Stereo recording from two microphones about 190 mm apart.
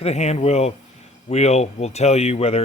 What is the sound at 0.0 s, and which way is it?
Speech, 35° left (ahead or behind).